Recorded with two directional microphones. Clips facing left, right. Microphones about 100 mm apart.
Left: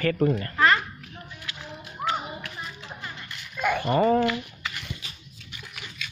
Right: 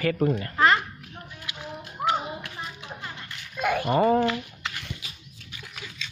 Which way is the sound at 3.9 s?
25° right (ahead or behind).